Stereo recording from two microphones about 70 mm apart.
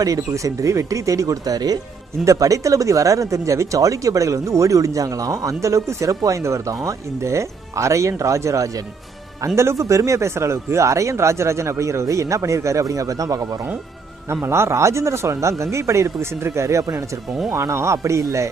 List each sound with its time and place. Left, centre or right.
0.0 s speech: right
2.2 s speech: right
14.3 s speech: right